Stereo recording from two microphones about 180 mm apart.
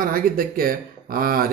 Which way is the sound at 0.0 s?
55° right (ahead or behind).